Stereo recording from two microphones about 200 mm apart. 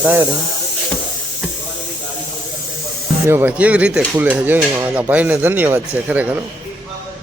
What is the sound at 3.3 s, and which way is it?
Dishes, 10° right (ahead or behind).